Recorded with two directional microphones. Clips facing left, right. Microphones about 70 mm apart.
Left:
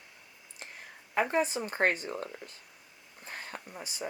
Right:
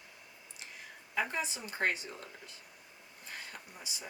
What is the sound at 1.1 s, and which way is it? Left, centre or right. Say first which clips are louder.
Speech: left 7 dB; left.